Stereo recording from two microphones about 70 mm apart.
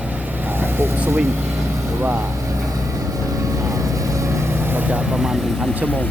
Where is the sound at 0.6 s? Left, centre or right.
Right.